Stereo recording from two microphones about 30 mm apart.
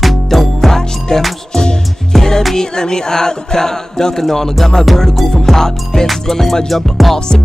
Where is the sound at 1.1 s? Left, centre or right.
Left.